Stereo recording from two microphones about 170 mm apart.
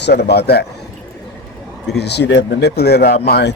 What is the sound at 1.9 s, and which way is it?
A man's voice, 75° left (ahead or behind).